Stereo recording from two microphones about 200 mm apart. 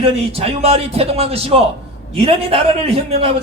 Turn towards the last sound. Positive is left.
turn(degrees=-30)  # may be behind; listen again after turning